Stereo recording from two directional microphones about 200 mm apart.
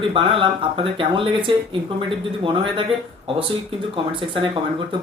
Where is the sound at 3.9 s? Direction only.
25° right (ahead or behind).